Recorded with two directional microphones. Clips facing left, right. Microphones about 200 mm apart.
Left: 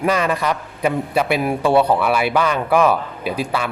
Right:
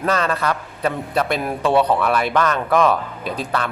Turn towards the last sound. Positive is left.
turn(degrees=10)  # may be behind; listen again after turning